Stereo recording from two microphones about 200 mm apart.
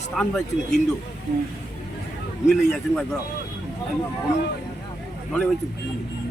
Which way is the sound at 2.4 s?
Centre (ahead or behind).